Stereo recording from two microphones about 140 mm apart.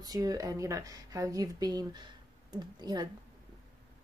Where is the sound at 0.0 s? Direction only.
25° right (ahead or behind).